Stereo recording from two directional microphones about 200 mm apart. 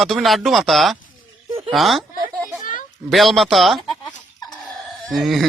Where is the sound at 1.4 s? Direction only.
25° right (ahead or behind).